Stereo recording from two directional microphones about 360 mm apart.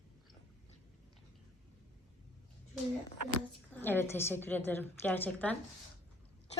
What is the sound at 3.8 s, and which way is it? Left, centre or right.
A woman's voice, centre.